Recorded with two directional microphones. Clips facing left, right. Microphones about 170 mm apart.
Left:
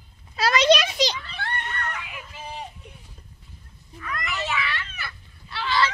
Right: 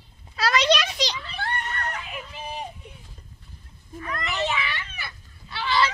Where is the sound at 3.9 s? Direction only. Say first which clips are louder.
Right 2 dB; 30° right (ahead or behind).